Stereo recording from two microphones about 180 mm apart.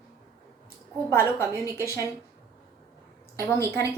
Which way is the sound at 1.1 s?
15° left (ahead or behind).